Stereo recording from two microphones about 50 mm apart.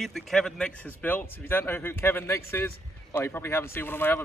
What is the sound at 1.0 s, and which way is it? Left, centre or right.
Speech, left.